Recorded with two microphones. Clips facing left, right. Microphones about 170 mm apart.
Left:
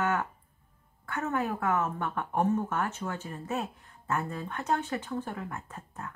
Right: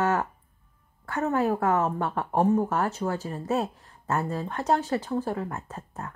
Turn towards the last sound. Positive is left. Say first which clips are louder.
# right 4 dB
turn(degrees=-40)  # may be behind; listen again after turning